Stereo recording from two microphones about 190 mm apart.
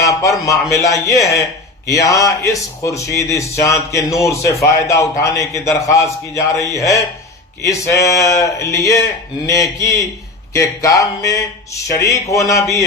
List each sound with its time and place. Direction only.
0.0 s speech: 15° left (ahead or behind)